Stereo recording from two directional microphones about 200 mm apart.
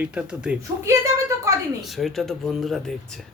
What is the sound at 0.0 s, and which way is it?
Speech, 5° right (ahead or behind).